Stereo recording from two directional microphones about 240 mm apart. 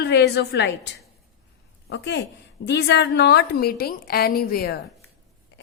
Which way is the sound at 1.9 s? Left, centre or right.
Left.